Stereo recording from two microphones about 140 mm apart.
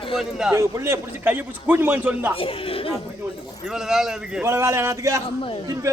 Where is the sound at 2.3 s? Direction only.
40° left (ahead or behind).